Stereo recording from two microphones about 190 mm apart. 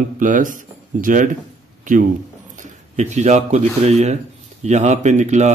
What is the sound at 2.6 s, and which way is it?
Speech, 40° right (ahead or behind).